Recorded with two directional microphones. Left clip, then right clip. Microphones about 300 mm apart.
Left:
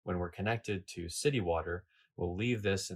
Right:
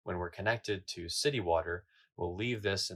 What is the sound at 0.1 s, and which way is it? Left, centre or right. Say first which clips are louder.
Speech: right 2 dB; right.